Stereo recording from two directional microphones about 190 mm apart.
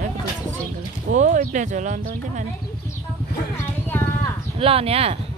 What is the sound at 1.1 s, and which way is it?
Speech, 45° right (ahead or behind).